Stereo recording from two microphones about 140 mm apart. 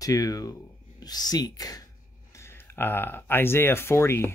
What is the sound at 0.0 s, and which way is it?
Speech, 25° left (ahead or behind).